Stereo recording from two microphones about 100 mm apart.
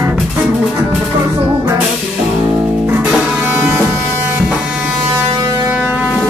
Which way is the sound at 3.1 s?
5° right (ahead or behind).